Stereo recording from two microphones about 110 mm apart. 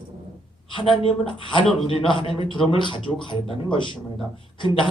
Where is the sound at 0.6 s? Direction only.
50° left (ahead or behind).